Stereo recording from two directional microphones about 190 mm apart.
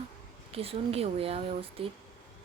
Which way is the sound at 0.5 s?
30° right (ahead or behind).